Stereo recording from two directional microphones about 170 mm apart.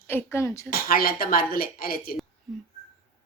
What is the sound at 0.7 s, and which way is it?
A woman's voice, 60° left (ahead or behind).